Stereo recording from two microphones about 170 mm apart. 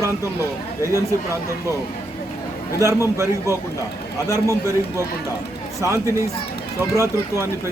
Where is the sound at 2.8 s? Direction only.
15° right (ahead or behind).